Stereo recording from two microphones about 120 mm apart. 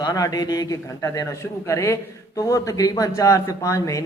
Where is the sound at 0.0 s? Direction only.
30° left (ahead or behind).